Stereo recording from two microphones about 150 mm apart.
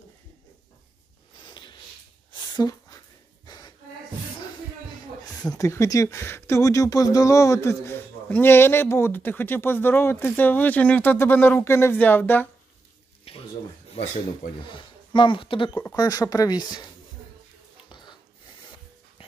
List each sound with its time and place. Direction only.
1.4 s snort: 30° left (ahead or behind)
2.3 s a sound: 25° left (ahead or behind)
5.5 s speech: 20° left (ahead or behind)
13.2 s a sound: 40° left (ahead or behind)
14.7 s speech: 35° left (ahead or behind)
16.0 s speech: 25° left (ahead or behind)